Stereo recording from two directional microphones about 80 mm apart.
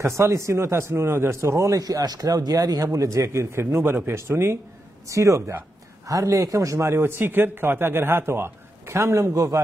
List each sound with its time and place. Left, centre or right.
0.0 s a man's voice: right
1.8 s a man's voice: right